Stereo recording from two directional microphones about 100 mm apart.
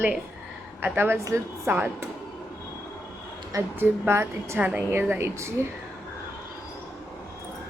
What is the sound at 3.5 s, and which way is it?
Speech, 25° right (ahead or behind).